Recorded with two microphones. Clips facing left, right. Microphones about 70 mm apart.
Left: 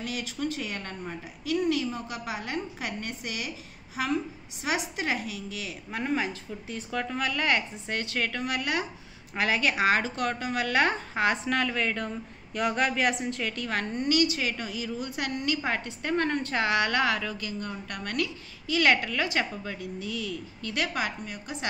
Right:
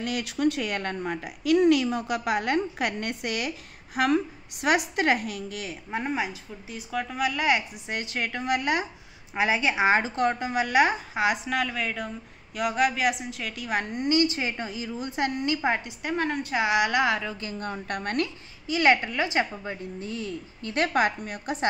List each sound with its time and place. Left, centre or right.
0.0 s a woman's voice: right
5.9 s a woman's voice: right
6.1 s a woman's voice: centre
17.4 s a woman's voice: right
18.7 s a woman's voice: right